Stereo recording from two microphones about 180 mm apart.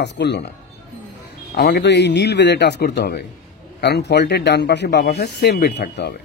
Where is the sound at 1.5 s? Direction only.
70° left (ahead or behind).